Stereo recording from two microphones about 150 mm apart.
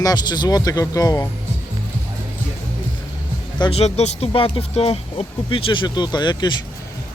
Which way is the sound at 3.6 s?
40° left (ahead or behind).